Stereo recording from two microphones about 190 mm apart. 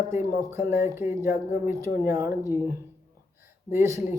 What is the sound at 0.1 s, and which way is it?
Speech, 15° right (ahead or behind).